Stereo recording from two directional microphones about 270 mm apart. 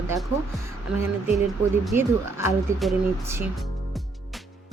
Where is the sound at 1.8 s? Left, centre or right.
Centre.